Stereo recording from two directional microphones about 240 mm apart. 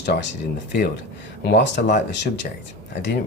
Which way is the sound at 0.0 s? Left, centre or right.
Left.